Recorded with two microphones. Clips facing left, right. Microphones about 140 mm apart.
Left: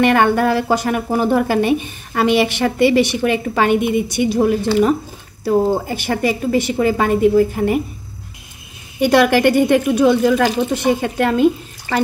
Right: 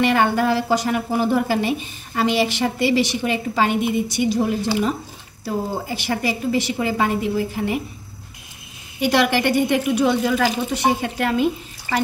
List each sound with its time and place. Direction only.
0.0 s a woman's voice: 55° left (ahead or behind)
9.0 s a woman's voice: 50° left (ahead or behind)